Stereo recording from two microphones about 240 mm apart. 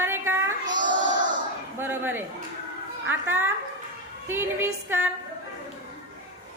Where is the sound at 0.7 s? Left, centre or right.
Right.